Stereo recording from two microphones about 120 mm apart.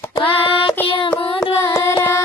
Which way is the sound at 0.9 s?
45° left (ahead or behind).